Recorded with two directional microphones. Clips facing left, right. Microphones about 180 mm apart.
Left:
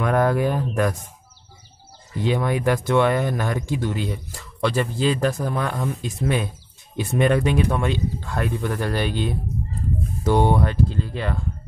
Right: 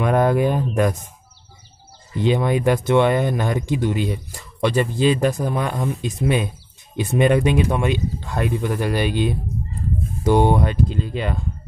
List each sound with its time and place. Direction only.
0.0 s speech: 20° right (ahead or behind)
2.1 s speech: 20° right (ahead or behind)